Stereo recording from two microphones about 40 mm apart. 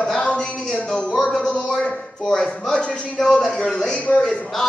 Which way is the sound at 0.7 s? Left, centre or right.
Left.